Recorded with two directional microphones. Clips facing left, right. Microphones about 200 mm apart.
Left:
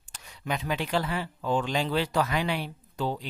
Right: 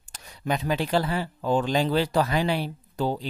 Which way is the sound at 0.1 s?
40° right (ahead or behind).